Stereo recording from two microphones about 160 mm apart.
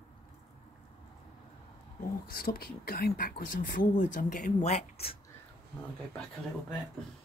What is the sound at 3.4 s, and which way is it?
Speech, 60° left (ahead or behind).